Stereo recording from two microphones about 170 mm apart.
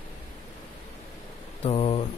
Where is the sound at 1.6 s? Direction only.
35° left (ahead or behind).